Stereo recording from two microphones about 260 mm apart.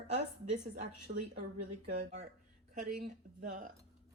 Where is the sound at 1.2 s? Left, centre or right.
Right.